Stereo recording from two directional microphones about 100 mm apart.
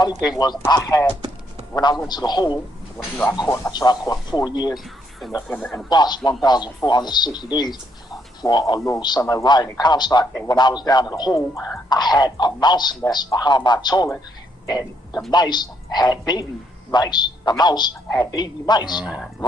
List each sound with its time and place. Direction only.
0.3 s a man's voice: 45° left (ahead or behind)
3.4 s speech: 30° left (ahead or behind)
3.7 s a man's voice: 45° left (ahead or behind)
5.5 s a man's voice: 5° left (ahead or behind)
5.9 s a man's voice: 45° left (ahead or behind); by 11.8 s 30° left (ahead or behind)
11.9 s a man's voice: 45° left (ahead or behind)
18.9 s speech: 10° right (ahead or behind)